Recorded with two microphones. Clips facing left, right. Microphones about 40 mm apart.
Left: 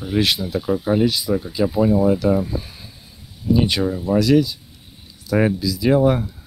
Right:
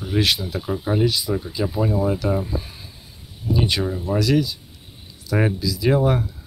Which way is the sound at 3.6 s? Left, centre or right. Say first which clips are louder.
Left 2 dB; left.